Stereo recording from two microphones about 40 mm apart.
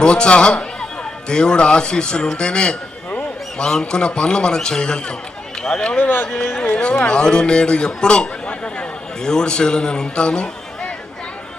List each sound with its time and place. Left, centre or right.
0.0 s a man's voice: left
6.0 s speech: left
6.7 s a man's voice: left